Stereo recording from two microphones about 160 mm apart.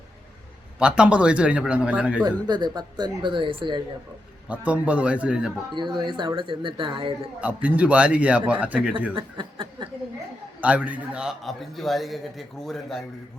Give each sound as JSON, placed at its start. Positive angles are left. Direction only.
{"t": 0.8, "sound": "speech", "side_deg": -5}
{"t": 2.2, "sound": "speech", "side_deg": -25}
{"t": 4.4, "sound": "speech", "side_deg": -10}
{"t": 5.7, "sound": "speech", "side_deg": -30}
{"t": 7.4, "sound": "speech", "side_deg": -10}
{"t": 9.1, "sound": "chuckle", "side_deg": -30}
{"t": 10.6, "sound": "a man's voice", "side_deg": -10}